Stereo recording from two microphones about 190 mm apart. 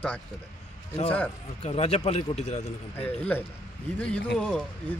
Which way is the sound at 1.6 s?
35° left (ahead or behind).